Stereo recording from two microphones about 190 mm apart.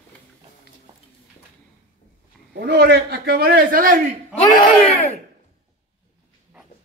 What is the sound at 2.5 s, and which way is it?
A man's voice, 55° right (ahead or behind).